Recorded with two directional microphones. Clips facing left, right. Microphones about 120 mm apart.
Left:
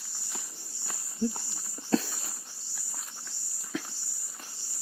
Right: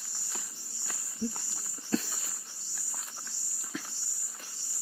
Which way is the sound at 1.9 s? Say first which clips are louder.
Left 4 dB; 90° left.